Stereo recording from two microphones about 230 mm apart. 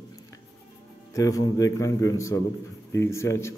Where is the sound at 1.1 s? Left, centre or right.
Centre.